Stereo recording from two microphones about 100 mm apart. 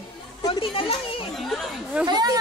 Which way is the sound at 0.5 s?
65° left (ahead or behind).